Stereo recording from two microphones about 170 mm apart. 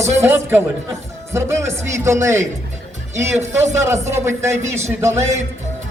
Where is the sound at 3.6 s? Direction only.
45° right (ahead or behind).